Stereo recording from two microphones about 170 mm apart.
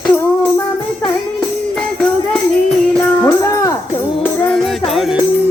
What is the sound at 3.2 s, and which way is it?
Music, 15° left (ahead or behind).